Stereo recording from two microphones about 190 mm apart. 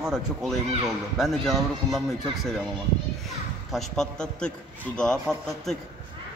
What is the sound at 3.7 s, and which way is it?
A man's voice, centre (ahead or behind).